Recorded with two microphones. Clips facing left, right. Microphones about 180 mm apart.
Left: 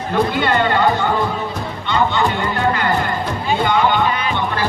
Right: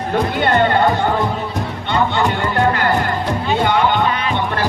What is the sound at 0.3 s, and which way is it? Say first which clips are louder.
Speech: right 2 dB; 50° right (ahead or behind).